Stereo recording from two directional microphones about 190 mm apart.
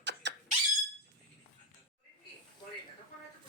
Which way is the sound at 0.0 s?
65° right (ahead or behind).